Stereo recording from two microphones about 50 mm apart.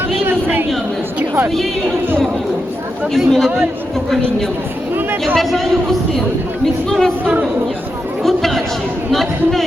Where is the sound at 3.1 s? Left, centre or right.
Centre.